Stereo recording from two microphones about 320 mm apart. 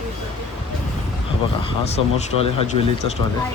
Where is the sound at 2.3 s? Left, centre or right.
Right.